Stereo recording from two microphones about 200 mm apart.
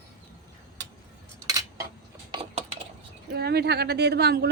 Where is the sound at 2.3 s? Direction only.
30° right (ahead or behind).